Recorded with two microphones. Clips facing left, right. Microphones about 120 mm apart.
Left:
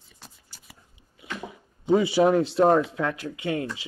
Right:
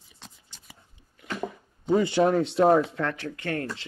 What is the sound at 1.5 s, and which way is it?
Speech, 10° left (ahead or behind).